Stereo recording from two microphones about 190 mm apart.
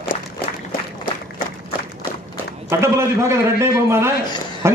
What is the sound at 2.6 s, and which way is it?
A man's voice, 15° right (ahead or behind).